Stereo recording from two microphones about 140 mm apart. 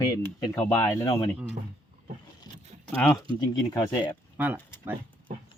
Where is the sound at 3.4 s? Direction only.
25° left (ahead or behind).